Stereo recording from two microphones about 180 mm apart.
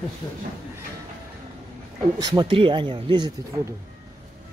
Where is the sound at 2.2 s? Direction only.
25° right (ahead or behind).